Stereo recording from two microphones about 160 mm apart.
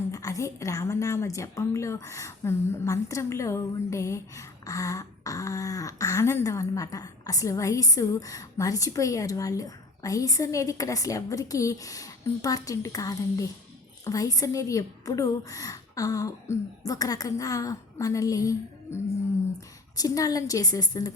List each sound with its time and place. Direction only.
0.1 s a woman's voice: 20° left (ahead or behind)